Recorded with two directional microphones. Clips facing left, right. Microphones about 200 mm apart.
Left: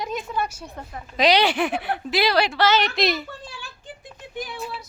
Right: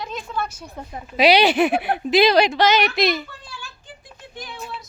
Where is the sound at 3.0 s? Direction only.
Centre (ahead or behind).